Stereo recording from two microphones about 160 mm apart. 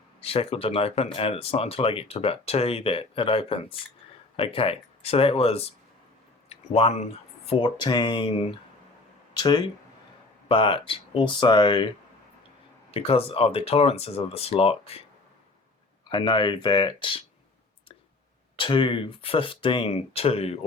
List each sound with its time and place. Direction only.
0.2 s speech: 40° left (ahead or behind)
12.9 s speech: 35° left (ahead or behind)
16.0 s speech: 30° left (ahead or behind)
18.6 s speech: 30° left (ahead or behind)